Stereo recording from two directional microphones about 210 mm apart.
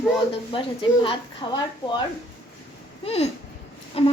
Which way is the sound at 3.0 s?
30° left (ahead or behind).